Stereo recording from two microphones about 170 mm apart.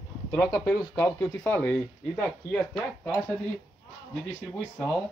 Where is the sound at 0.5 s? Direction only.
10° left (ahead or behind).